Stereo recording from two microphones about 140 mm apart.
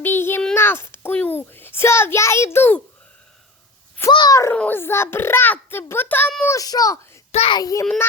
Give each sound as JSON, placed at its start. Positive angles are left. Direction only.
{"t": 0.0, "sound": "a sound", "side_deg": 15}
{"t": 4.1, "sound": "a child's voice", "side_deg": 30}
{"t": 4.5, "sound": "a child's voice", "side_deg": 10}
{"t": 7.3, "sound": "a child's voice", "side_deg": 50}
{"t": 7.5, "sound": "a child's voice", "side_deg": 25}